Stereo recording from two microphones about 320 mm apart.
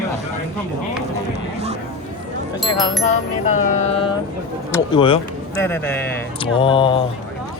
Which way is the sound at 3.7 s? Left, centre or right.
Centre.